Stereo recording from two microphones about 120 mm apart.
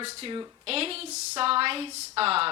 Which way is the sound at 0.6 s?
55° right (ahead or behind).